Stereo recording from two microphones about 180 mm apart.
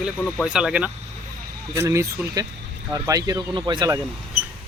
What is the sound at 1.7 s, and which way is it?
Speech, 15° right (ahead or behind).